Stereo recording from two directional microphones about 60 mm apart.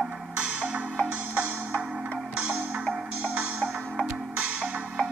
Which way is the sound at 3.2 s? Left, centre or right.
Centre.